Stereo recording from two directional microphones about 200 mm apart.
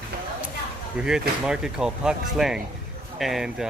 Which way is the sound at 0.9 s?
5° right (ahead or behind).